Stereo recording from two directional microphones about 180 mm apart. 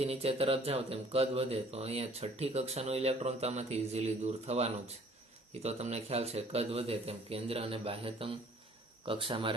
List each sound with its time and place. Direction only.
0.0 s speech: 35° right (ahead or behind)